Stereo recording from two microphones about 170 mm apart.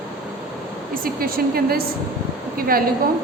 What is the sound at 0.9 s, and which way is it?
A woman's voice, 60° right (ahead or behind).